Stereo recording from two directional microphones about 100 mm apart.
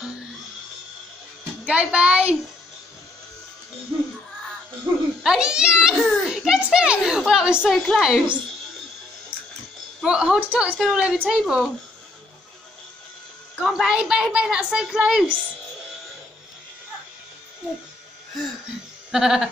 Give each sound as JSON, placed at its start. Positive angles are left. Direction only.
{"t": 1.7, "sound": "a woman's voice", "side_deg": -10}
{"t": 4.9, "sound": "speech", "side_deg": -20}
{"t": 5.2, "sound": "a woman's voice", "side_deg": -5}
{"t": 7.7, "sound": "a woman's voice", "side_deg": 0}
{"t": 10.0, "sound": "a woman's voice", "side_deg": -10}
{"t": 13.6, "sound": "a woman's voice", "side_deg": -5}
{"t": 19.1, "sound": "a woman's voice", "side_deg": -5}